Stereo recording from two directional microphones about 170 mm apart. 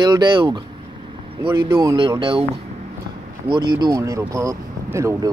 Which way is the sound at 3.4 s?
25° right (ahead or behind).